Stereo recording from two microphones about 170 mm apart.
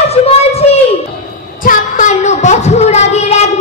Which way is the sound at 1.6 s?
50° left (ahead or behind).